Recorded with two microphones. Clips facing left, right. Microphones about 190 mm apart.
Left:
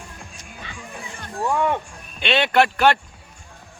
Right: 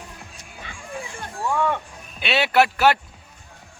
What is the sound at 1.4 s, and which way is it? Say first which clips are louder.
Music: left 2 dB; 15° left (ahead or behind).